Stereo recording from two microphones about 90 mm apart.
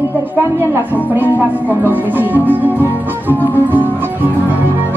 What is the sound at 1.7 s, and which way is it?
Speech, 20° right (ahead or behind).